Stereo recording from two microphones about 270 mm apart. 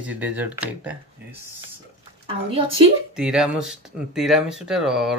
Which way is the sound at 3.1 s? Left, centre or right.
Centre.